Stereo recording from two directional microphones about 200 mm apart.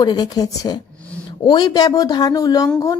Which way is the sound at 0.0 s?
20° left (ahead or behind).